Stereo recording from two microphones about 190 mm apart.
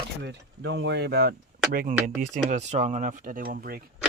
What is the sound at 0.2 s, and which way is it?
Speech, 65° right (ahead or behind).